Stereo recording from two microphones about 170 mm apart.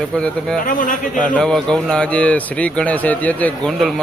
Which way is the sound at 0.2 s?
5° left (ahead or behind).